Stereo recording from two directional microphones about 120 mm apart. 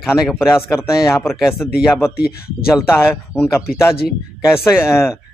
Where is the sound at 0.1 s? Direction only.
5° right (ahead or behind).